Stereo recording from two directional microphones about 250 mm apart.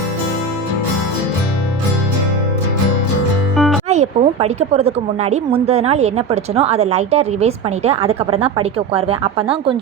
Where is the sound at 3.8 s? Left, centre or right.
Right.